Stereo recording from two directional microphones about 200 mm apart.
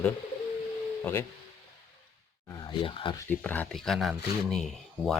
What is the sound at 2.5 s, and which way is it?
Speech, 25° left (ahead or behind).